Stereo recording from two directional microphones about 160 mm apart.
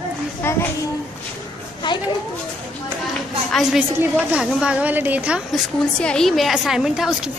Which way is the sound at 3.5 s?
Centre (ahead or behind).